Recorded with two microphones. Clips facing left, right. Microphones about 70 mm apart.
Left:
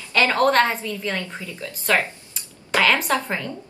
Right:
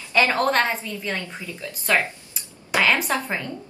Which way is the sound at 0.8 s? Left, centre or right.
Right.